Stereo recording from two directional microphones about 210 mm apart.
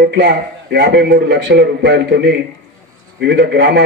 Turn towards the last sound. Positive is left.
turn(degrees=-55)  # may be behind; listen again after turning